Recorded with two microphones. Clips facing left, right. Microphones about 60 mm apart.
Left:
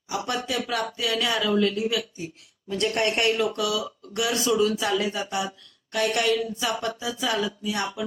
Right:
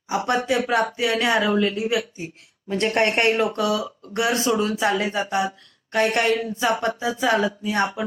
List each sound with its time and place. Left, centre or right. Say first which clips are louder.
0.1 s speech: right 6 dB; right